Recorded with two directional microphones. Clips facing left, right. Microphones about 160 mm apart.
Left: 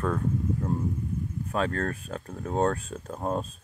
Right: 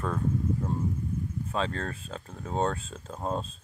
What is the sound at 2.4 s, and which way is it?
Speech, 5° left (ahead or behind).